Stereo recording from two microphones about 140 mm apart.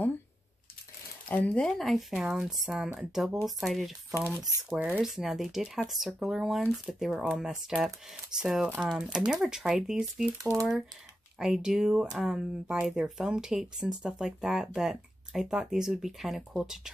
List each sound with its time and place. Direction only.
1.3 s speech: 10° left (ahead or behind)
4.6 s speech: 10° right (ahead or behind)
10.3 s speech: 25° right (ahead or behind)
11.3 s speech: 5° right (ahead or behind)